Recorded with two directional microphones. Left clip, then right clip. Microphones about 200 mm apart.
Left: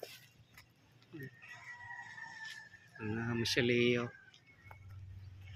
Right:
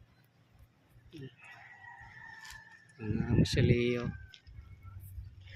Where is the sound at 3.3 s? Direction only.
5° right (ahead or behind).